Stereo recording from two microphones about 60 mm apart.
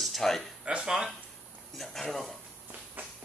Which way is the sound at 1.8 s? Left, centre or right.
Centre.